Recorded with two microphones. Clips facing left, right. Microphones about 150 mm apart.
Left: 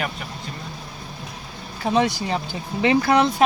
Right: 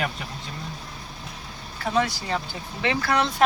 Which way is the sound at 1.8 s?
20° left (ahead or behind).